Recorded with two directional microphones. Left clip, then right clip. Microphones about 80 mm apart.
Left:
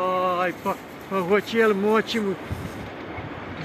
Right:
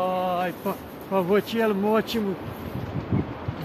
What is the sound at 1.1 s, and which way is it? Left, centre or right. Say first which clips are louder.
Speech: even; right.